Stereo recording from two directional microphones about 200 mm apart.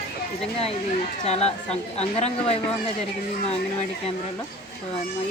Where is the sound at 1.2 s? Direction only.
30° left (ahead or behind).